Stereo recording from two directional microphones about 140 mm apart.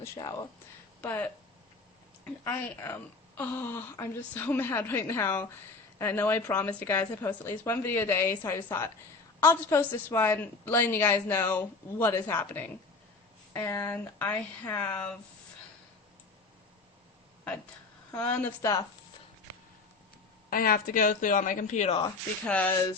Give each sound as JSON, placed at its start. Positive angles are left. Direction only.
{"t": 0.0, "sound": "speech", "side_deg": 20}
{"t": 1.0, "sound": "a woman's voice", "side_deg": 10}
{"t": 2.4, "sound": "a woman's voice", "side_deg": 15}
{"t": 18.1, "sound": "a woman's voice", "side_deg": 10}
{"t": 18.6, "sound": "speech", "side_deg": 25}
{"t": 20.5, "sound": "speech", "side_deg": 90}
{"t": 22.4, "sound": "a woman's voice", "side_deg": 10}